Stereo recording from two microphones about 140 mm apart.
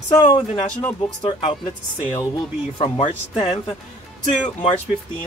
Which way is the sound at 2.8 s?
40° left (ahead or behind).